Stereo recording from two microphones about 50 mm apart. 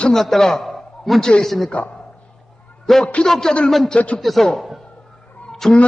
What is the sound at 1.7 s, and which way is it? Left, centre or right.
Speech, left.